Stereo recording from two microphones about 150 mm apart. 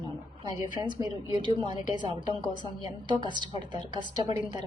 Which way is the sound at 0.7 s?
30° right (ahead or behind).